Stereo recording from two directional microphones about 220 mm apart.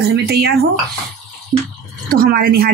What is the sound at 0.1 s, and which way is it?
Speech, 45° right (ahead or behind).